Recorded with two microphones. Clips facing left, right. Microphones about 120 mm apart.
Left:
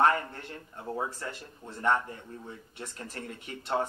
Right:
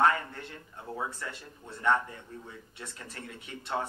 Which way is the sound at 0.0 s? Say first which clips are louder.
Left 1 dB; 40° left (ahead or behind).